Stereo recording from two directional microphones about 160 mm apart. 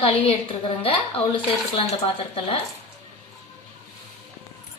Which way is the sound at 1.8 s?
35° left (ahead or behind).